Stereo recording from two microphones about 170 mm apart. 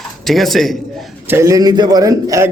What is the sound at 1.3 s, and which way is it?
A man's voice, 20° right (ahead or behind).